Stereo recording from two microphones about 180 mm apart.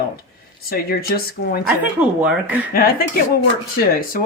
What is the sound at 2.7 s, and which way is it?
Speech, 55° left (ahead or behind).